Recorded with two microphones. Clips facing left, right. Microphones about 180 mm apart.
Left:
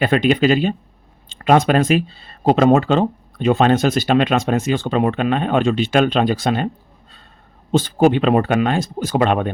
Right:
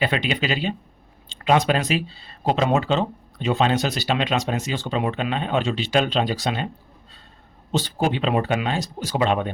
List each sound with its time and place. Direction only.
0.0 s speech: 50° left (ahead or behind)
7.7 s speech: 50° left (ahead or behind)